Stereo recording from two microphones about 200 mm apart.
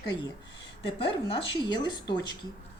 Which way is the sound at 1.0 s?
30° left (ahead or behind).